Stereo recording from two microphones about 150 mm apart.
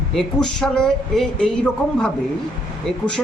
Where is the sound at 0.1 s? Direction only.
5° left (ahead or behind).